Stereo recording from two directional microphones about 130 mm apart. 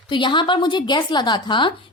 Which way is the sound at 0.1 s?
40° left (ahead or behind).